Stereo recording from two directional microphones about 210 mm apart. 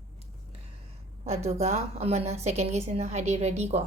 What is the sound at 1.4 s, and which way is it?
A woman's voice, 30° right (ahead or behind).